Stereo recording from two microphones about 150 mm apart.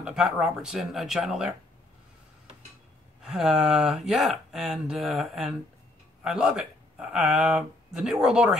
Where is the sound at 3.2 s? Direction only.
Centre (ahead or behind).